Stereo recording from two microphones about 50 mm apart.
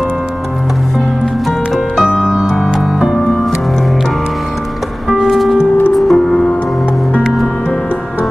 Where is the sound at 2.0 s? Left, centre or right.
Centre.